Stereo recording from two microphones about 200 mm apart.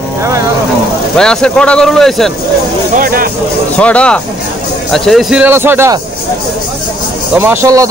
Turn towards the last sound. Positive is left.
turn(degrees=-15)  # may be behind; listen again after turning